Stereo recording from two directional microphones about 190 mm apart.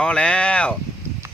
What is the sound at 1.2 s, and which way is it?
Clip-clop, 15° right (ahead or behind).